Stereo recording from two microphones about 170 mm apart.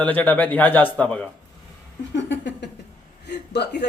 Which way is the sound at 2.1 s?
90° left.